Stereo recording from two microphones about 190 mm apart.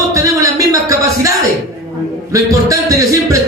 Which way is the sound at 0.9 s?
15° right (ahead or behind).